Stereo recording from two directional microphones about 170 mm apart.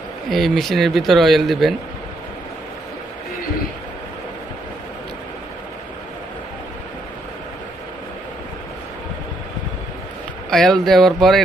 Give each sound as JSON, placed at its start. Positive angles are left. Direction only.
{"t": 0.3, "sound": "speech", "side_deg": 0}
{"t": 10.5, "sound": "speech", "side_deg": 5}